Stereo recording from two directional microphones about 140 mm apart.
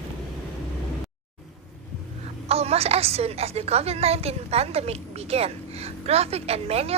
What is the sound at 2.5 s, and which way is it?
A woman's voice, 45° right (ahead or behind).